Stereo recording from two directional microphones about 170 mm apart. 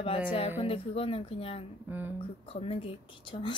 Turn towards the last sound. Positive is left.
turn(degrees=30)  # may be behind; listen again after turning